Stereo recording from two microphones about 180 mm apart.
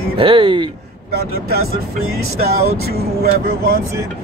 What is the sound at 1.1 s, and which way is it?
Speech, 60° right (ahead or behind).